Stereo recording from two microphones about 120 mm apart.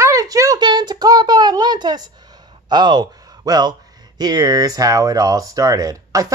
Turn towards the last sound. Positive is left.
turn(degrees=-30)  # may be behind; listen again after turning